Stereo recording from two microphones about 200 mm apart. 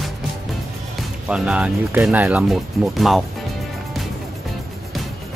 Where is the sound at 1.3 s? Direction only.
5° right (ahead or behind).